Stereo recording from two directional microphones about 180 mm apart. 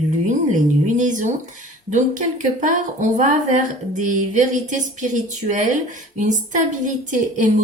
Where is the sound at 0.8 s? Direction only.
40° right (ahead or behind).